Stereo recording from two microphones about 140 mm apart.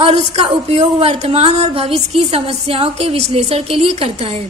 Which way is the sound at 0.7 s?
45° right (ahead or behind).